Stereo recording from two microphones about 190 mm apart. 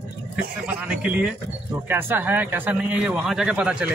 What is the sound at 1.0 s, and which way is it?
A man's voice, 5° right (ahead or behind).